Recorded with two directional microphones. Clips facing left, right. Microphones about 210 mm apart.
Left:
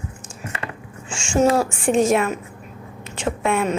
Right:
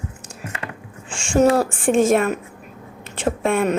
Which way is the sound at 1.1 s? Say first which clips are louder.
Right 2 dB; 55° right (ahead or behind).